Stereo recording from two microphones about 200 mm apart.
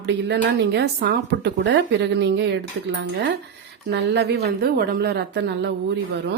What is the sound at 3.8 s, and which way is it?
A woman's voice, 60° right (ahead or behind).